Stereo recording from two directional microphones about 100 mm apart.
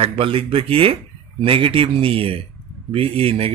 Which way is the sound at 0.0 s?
70° right (ahead or behind).